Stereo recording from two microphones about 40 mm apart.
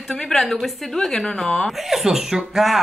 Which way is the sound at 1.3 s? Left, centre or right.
Centre.